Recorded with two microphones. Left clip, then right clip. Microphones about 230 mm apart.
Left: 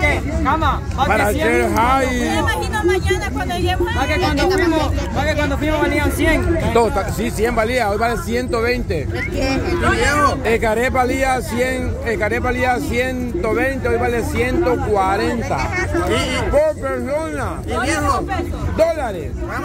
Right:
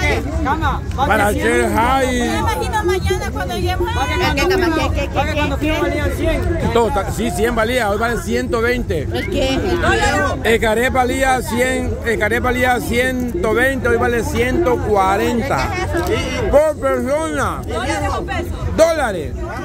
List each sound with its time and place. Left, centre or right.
0.1 s a sound: centre
1.0 s speech: centre
4.2 s speech: right
5.9 s speech: left
6.7 s speech: centre
10.4 s speech: centre
18.8 s speech: centre